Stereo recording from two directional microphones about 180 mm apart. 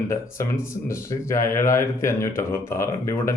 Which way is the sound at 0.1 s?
15° left (ahead or behind).